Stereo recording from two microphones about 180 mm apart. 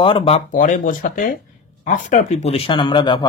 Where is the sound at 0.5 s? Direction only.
50° left (ahead or behind).